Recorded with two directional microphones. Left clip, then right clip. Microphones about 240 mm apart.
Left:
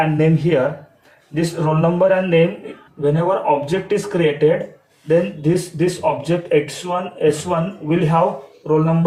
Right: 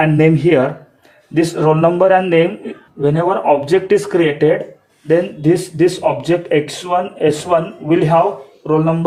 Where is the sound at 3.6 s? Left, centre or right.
Right.